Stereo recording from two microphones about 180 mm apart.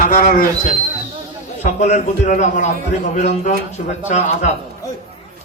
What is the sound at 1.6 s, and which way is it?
A man's voice, 40° left (ahead or behind).